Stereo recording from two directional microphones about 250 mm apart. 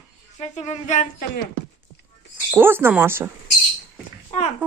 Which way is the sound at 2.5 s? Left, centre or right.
Centre.